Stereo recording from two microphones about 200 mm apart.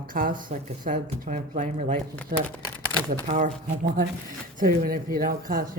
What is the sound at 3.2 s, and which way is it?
Speech, 40° right (ahead or behind).